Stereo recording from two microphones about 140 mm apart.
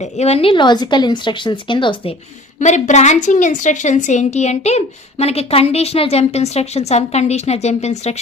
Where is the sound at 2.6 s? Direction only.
55° left (ahead or behind).